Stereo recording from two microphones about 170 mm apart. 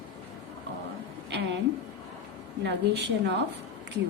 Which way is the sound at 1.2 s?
90° right.